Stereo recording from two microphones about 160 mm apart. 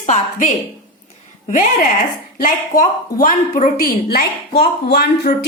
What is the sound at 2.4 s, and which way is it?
A woman's voice, 60° left (ahead or behind).